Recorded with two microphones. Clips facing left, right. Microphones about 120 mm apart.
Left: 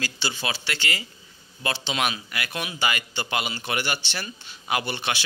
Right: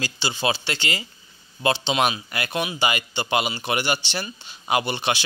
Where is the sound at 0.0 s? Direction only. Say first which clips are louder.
Right 5 dB; 20° right (ahead or behind).